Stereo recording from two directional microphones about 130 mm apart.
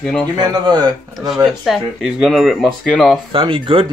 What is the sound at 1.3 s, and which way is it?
Speech, 5° right (ahead or behind).